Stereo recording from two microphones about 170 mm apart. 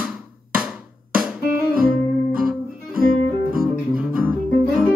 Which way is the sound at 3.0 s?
55° right (ahead or behind).